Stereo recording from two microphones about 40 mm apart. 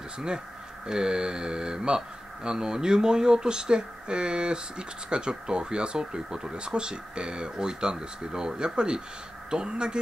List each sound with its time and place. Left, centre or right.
0.8 s speech: centre